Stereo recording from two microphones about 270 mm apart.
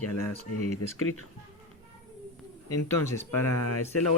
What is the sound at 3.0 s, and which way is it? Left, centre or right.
Speech, centre.